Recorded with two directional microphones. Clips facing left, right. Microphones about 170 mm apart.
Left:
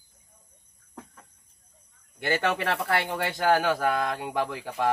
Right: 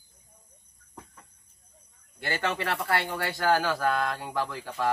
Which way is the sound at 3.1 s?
20° left (ahead or behind).